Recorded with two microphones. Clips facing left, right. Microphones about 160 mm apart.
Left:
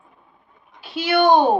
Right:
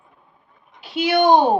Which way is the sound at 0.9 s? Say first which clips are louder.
Even; 20° right (ahead or behind).